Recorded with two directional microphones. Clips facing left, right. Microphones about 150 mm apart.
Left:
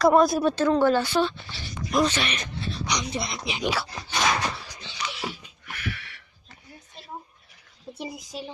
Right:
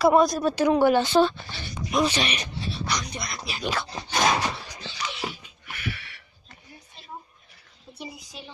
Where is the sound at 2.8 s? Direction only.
20° left (ahead or behind).